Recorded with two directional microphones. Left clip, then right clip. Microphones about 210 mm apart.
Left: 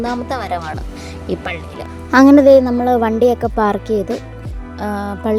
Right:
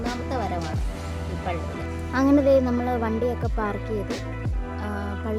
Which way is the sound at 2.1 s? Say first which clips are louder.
Left 12 dB; 45° left (ahead or behind).